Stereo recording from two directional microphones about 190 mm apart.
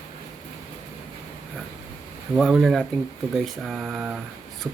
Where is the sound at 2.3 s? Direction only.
Centre (ahead or behind).